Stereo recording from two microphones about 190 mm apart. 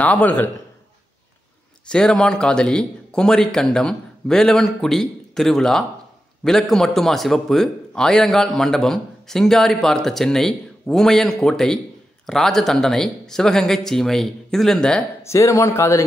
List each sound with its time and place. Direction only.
0.0 s speech: 5° left (ahead or behind)
1.9 s a man's voice: 5° left (ahead or behind)
15.2 s speech: 15° left (ahead or behind)